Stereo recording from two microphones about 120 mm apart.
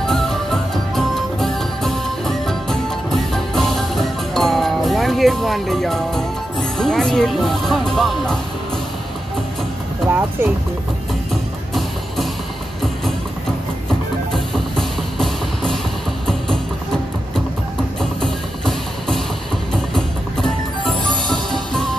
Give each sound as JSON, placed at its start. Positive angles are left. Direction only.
{"t": 0.0, "sound": "music", "side_deg": 5}
{"t": 6.8, "sound": "speech", "side_deg": 5}
{"t": 10.0, "sound": "speech", "side_deg": -15}
{"t": 14.3, "sound": "music", "side_deg": 0}
{"t": 18.2, "sound": "music", "side_deg": 5}
{"t": 20.4, "sound": "music", "side_deg": 5}